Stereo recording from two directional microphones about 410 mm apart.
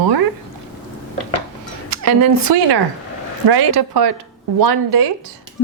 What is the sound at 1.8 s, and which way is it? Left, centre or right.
Speech, right.